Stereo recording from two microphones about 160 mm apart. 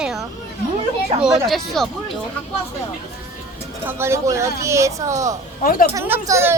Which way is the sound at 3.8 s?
15° right (ahead or behind).